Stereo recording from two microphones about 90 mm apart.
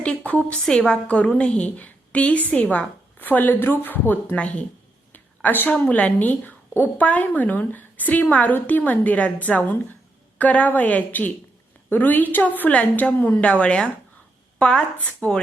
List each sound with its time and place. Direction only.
0.0 s a woman's voice: 15° left (ahead or behind)